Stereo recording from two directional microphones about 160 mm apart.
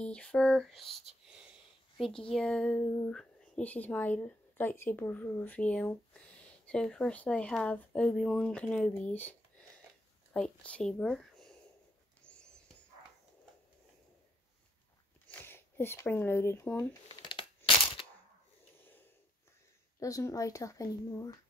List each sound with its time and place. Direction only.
0.0 s speech: 5° left (ahead or behind)
1.3 s a sound: 5° right (ahead or behind)
2.3 s speech: 5° left (ahead or behind)
10.3 s speech: 5° left (ahead or behind)
12.2 s wheeze: 5° left (ahead or behind)
15.2 s speech: 15° left (ahead or behind)
17.1 s tearing: 30° left (ahead or behind)
18.8 s snort: 15° left (ahead or behind)
20.0 s speech: 20° left (ahead or behind)